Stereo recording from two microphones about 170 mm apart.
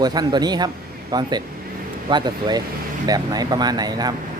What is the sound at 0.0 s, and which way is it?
Speech, 25° right (ahead or behind).